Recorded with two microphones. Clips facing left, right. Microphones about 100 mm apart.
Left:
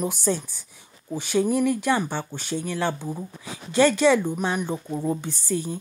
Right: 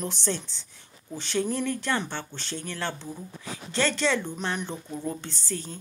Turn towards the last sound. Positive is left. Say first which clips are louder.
# left 8 dB
turn(degrees=15)  # may be behind; listen again after turning